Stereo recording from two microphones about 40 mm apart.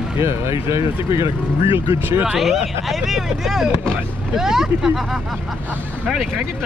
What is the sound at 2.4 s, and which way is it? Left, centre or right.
Speech, centre.